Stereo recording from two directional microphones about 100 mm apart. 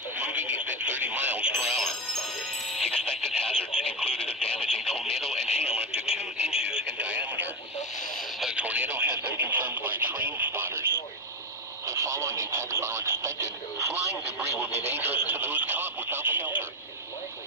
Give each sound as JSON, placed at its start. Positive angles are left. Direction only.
{"t": 0.2, "sound": "speech", "side_deg": -15}
{"t": 2.7, "sound": "radio", "side_deg": 5}
{"t": 5.7, "sound": "radio", "side_deg": -10}
{"t": 11.9, "sound": "speech", "side_deg": -30}